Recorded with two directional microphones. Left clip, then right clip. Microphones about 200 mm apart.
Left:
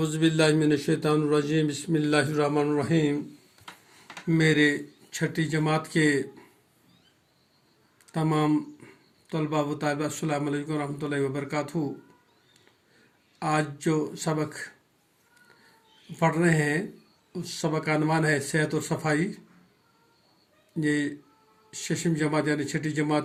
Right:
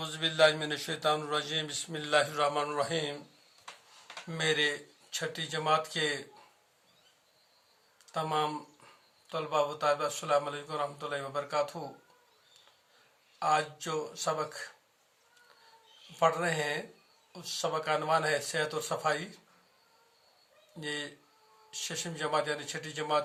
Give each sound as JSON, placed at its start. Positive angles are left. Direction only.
{"t": 0.0, "sound": "a man's voice", "side_deg": 0}
{"t": 4.3, "sound": "a man's voice", "side_deg": 10}
{"t": 9.6, "sound": "a man's voice", "side_deg": 10}
{"t": 13.4, "sound": "a man's voice", "side_deg": 10}
{"t": 16.1, "sound": "a man's voice", "side_deg": 10}
{"t": 20.8, "sound": "a man's voice", "side_deg": 10}